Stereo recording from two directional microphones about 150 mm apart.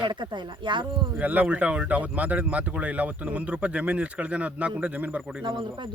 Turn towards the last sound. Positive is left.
turn(degrees=-30)  # may be behind; listen again after turning